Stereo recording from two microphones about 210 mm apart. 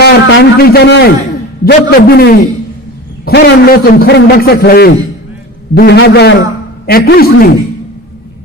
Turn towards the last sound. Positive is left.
turn(degrees=45)  # may be behind; listen again after turning